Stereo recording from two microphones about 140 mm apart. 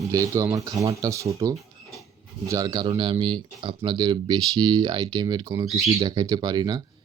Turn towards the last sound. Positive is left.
turn(degrees=-30)  # may be behind; listen again after turning